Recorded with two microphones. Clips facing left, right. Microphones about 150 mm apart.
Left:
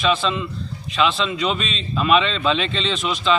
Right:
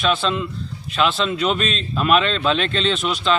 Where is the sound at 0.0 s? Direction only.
Centre (ahead or behind).